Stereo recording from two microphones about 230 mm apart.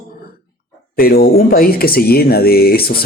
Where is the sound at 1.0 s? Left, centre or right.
Left.